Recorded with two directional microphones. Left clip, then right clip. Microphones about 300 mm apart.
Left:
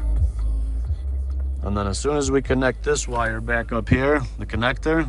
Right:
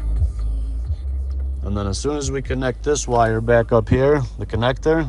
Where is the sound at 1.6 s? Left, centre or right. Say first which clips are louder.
Even; centre.